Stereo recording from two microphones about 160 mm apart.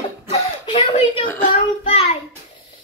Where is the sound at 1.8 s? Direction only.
40° left (ahead or behind).